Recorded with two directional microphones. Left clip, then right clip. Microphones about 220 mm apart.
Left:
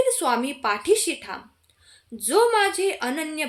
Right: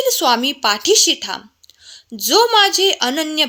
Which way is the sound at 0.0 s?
40° right (ahead or behind).